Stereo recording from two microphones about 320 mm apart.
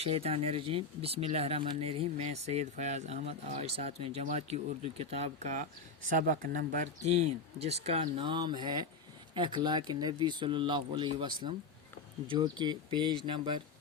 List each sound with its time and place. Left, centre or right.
0.0 s speech: centre